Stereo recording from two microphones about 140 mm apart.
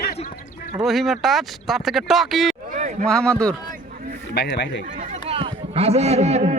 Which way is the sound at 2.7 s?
65° right (ahead or behind).